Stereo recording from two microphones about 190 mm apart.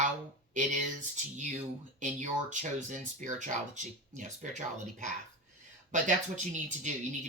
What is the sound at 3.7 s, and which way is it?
Speech, 40° right (ahead or behind).